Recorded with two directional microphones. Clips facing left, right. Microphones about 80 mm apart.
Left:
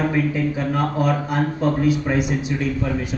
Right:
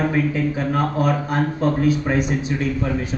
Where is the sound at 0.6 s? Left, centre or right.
Right.